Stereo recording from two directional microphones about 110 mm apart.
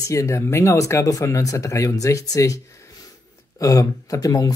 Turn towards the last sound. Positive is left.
turn(degrees=30)  # may be behind; listen again after turning